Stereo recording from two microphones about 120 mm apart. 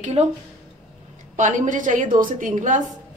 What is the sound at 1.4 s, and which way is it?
A woman's voice, 90° right.